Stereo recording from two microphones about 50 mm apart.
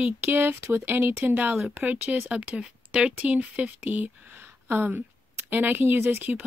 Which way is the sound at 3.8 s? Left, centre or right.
Right.